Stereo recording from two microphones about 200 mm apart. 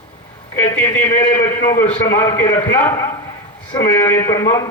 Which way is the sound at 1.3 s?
45° left (ahead or behind).